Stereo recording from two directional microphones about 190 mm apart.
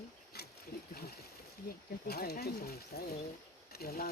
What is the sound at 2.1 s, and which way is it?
Speech, 55° left (ahead or behind).